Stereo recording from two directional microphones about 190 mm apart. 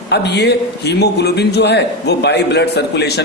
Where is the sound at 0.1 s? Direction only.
60° left (ahead or behind).